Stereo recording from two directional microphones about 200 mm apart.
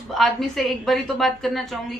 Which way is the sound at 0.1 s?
Centre (ahead or behind).